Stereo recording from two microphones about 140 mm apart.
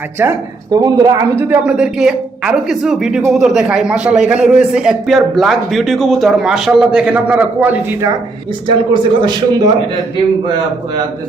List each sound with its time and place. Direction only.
0.2 s a woman's voice: 15° right (ahead or behind)
8.6 s a man's voice: 35° right (ahead or behind)